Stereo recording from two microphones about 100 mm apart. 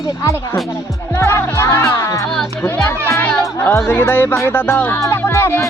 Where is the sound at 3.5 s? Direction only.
25° left (ahead or behind).